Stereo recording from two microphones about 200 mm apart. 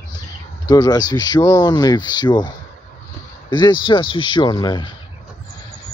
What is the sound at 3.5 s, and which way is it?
Speech, 20° left (ahead or behind).